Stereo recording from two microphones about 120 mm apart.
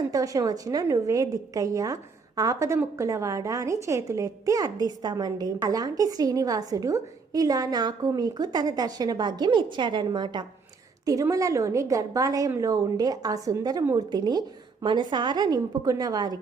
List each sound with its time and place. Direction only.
0.1 s a woman's voice: 30° right (ahead or behind)